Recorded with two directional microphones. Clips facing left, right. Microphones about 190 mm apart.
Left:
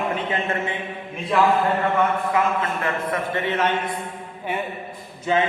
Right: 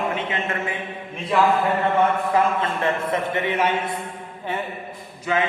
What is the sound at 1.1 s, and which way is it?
Speech, centre (ahead or behind).